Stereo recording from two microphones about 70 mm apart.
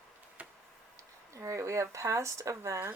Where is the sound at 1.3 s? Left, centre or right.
Right.